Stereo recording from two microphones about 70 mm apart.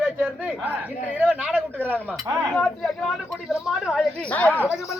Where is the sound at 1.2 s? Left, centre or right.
Centre.